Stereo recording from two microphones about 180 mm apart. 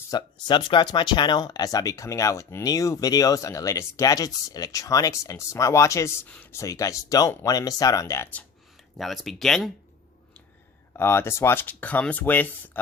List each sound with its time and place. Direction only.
0.1 s speech: 25° left (ahead or behind)
9.0 s speech: centre (ahead or behind)
10.9 s speech: 15° left (ahead or behind)